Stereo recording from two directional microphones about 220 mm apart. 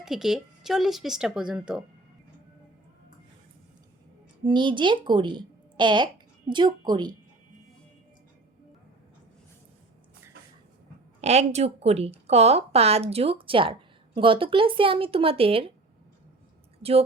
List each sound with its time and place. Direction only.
0.0 s speech: centre (ahead or behind)
4.4 s a woman's voice: 20° right (ahead or behind)
11.2 s a woman's voice: 30° right (ahead or behind)